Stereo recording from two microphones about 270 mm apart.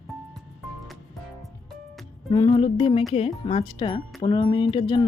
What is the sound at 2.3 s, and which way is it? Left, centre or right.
Speech, centre.